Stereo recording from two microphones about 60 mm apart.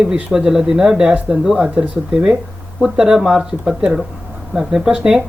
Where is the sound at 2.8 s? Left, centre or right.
Centre.